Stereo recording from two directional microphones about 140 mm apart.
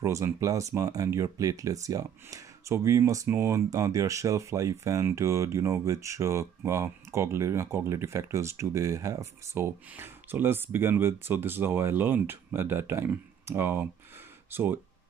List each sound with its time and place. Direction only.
0.0 s speech: 20° right (ahead or behind)